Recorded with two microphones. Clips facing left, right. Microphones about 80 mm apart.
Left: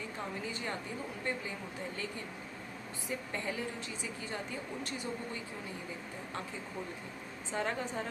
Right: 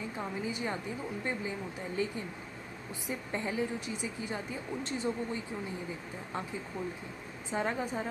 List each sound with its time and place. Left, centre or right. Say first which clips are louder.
0.4 s a woman's voice: right 6 dB; centre
3.1 s a woman's voice: right 2 dB; centre
7.5 s a woman's voice: right 3 dB; centre